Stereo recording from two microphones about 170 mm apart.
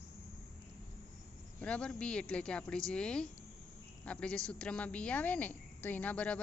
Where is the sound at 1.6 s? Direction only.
5° left (ahead or behind).